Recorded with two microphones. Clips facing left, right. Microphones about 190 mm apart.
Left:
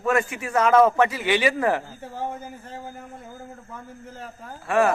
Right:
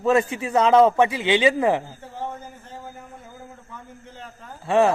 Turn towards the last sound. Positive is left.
turn(degrees=-20)  # may be behind; listen again after turning